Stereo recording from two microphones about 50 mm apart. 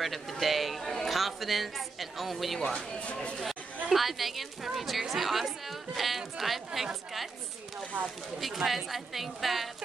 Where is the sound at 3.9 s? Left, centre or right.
Centre.